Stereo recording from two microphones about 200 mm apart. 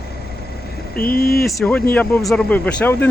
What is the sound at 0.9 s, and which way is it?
Speech, 45° left (ahead or behind).